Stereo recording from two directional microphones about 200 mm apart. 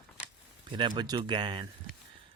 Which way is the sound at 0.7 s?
25° right (ahead or behind).